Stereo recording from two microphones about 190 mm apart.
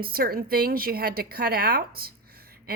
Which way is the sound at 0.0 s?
50° right (ahead or behind).